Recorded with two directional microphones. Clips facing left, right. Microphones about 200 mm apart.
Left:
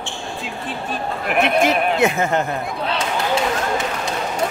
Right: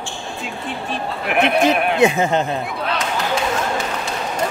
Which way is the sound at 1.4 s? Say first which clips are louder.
Right 1 dB; 15° right (ahead or behind).